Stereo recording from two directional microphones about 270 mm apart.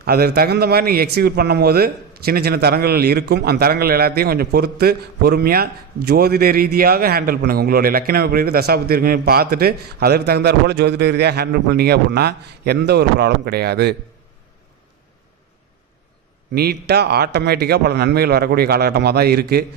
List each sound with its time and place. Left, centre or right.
0.0 s a man's voice: right
16.6 s a man's voice: right